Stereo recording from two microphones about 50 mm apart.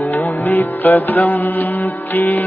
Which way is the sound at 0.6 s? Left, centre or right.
Left.